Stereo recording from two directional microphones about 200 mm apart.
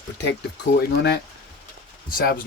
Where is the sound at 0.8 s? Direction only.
55° left (ahead or behind).